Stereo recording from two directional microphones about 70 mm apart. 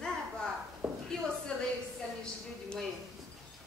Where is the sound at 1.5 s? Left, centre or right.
Centre.